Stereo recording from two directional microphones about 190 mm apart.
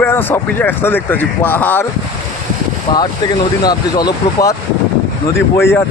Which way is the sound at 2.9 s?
20° left (ahead or behind).